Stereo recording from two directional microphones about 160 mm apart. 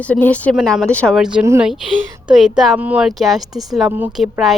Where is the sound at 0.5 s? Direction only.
Centre (ahead or behind).